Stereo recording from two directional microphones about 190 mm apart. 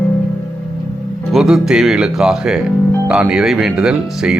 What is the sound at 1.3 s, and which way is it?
Speech, centre (ahead or behind).